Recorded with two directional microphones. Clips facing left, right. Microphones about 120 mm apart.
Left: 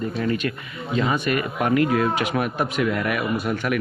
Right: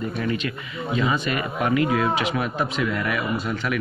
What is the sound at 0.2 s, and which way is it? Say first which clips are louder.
Speech: left 3 dB; 50° left (ahead or behind).